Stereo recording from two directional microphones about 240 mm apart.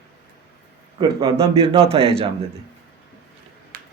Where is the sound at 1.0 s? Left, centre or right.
Centre.